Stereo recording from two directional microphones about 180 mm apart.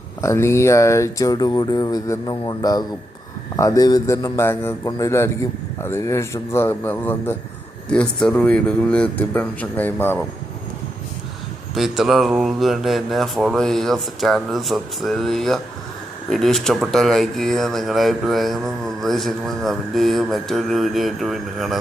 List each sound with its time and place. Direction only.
0.2 s a man's voice: 15° left (ahead or behind)
11.7 s speech: centre (ahead or behind)